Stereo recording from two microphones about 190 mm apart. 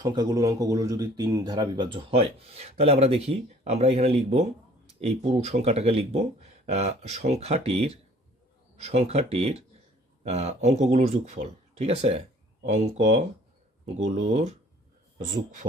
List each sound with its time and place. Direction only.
0.0 s speech: 20° right (ahead or behind); by 14.5 s 35° right (ahead or behind)